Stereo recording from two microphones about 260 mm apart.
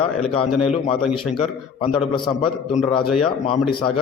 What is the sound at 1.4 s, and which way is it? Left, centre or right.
Speech, centre.